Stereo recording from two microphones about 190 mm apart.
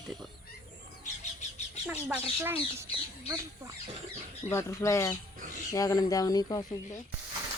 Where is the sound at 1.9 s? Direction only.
10° right (ahead or behind).